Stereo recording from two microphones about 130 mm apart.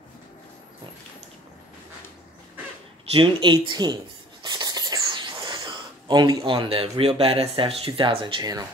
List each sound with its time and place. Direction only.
3.1 s speech: 40° right (ahead or behind)